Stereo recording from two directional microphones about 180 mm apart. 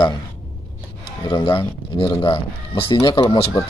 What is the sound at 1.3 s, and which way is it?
Speech, 25° left (ahead or behind).